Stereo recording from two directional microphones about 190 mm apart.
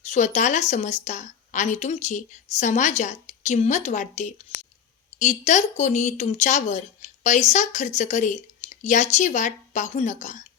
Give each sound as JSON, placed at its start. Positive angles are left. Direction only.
{"t": 0.0, "sound": "speech", "side_deg": 40}